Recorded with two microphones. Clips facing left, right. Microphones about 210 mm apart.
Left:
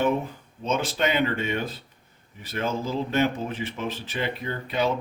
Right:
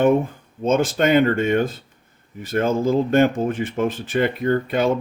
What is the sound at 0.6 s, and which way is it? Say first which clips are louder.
Speech: right 7 dB; 45° right (ahead or behind).